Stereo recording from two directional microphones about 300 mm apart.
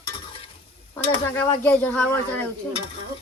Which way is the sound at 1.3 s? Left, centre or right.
Centre.